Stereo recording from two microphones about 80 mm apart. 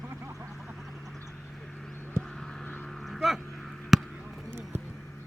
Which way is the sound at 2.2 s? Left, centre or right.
Right.